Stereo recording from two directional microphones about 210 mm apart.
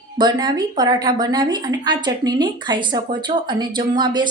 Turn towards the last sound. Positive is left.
turn(degrees=-20)  # may be behind; listen again after turning